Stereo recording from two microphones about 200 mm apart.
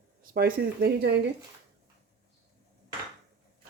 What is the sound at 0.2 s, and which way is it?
Speech, 50° right (ahead or behind).